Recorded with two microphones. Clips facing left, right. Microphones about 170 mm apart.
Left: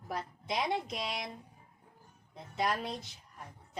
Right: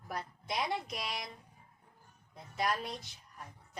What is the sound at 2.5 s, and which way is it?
Speech, 25° left (ahead or behind).